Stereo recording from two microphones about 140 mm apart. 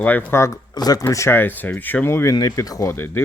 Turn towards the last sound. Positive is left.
turn(degrees=20)  # may be behind; listen again after turning